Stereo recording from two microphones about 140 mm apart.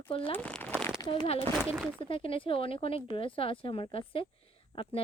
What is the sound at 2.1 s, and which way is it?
Speech, 40° left (ahead or behind).